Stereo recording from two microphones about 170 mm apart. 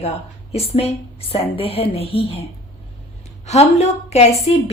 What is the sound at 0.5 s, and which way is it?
A woman's voice, 35° left (ahead or behind).